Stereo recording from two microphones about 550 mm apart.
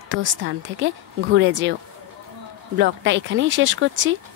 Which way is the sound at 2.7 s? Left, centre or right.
Centre.